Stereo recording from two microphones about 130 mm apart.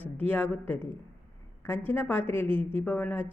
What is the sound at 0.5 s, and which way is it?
Speech, 15° left (ahead or behind).